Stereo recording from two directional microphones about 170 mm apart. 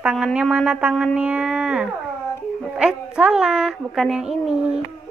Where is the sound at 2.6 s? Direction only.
5° right (ahead or behind).